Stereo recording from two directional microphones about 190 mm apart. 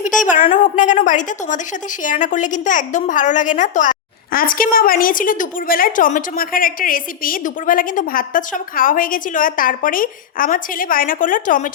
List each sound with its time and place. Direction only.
0.5 s a woman's voice: 40° left (ahead or behind)